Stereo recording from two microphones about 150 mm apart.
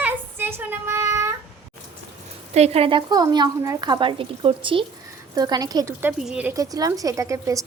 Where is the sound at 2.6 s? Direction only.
45° right (ahead or behind).